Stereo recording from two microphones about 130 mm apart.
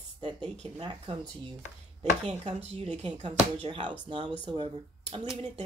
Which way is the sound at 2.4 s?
55° right (ahead or behind).